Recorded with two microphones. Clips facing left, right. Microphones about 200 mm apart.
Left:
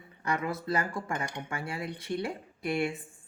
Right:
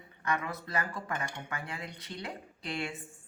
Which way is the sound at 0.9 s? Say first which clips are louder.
Left 3 dB; 25° left (ahead or behind).